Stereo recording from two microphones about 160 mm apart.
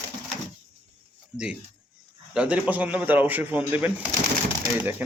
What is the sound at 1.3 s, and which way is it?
A man's voice, 5° right (ahead or behind).